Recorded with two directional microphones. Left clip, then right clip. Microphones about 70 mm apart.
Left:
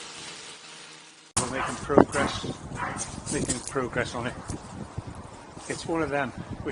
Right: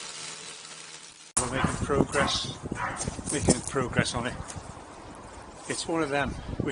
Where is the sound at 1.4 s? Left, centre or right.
Centre.